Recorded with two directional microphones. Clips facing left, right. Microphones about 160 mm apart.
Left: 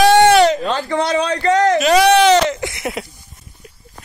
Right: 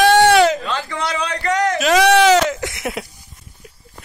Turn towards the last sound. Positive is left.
turn(degrees=0)  # may be behind; listen again after turning